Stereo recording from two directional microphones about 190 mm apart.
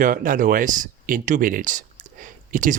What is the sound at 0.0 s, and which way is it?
Speech, 45° right (ahead or behind).